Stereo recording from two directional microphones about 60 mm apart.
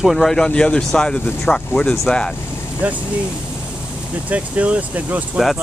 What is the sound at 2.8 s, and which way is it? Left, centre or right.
Speech, right.